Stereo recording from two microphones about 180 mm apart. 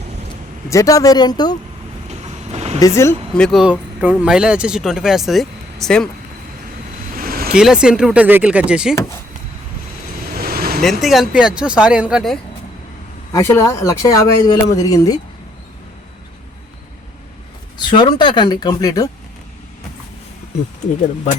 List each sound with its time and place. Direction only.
0.7 s speech: 20° left (ahead or behind)
2.0 s vehicle: 35° right (ahead or behind)
2.8 s speech: 15° left (ahead or behind)
3.3 s speech: centre (ahead or behind)
7.1 s vehicle: 50° right (ahead or behind)
7.5 s speech: 5° right (ahead or behind)
10.3 s vehicle: 55° right (ahead or behind)
10.8 s speech: centre (ahead or behind)
13.3 s speech: 15° left (ahead or behind)
17.7 s speech: 25° left (ahead or behind)